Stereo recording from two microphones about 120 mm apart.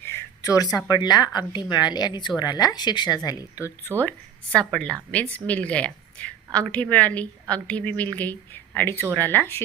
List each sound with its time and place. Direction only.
0.0 s a sound: 20° left (ahead or behind)
0.9 s speech: 35° left (ahead or behind)
4.5 s a woman's voice: 10° left (ahead or behind)